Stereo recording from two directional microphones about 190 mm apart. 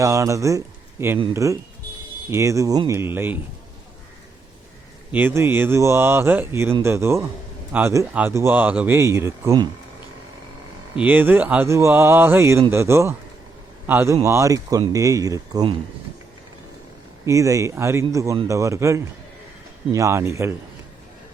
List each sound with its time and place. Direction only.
0.0 s speech: 15° right (ahead or behind)
5.1 s speech: 10° right (ahead or behind)
11.0 s speech: 10° right (ahead or behind)
17.2 s speech: 15° right (ahead or behind)